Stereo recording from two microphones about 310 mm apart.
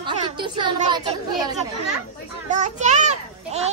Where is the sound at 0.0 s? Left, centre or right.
Centre.